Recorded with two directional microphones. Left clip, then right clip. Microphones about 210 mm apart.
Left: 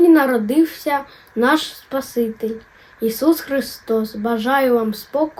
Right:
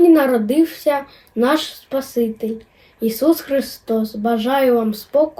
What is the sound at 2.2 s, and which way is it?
Speech, 15° left (ahead or behind).